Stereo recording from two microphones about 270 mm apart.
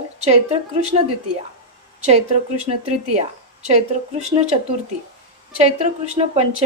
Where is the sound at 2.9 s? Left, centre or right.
Right.